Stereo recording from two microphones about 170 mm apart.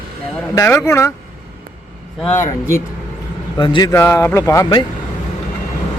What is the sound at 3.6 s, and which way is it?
Speech, 25° left (ahead or behind).